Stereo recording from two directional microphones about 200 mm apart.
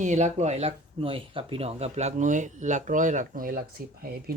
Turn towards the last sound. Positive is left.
turn(degrees=-50)  # may be behind; listen again after turning